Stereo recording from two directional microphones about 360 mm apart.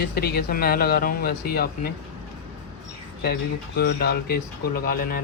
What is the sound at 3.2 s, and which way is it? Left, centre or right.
Speech, left.